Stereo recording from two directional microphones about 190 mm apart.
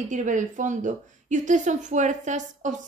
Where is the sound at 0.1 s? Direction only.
40° right (ahead or behind).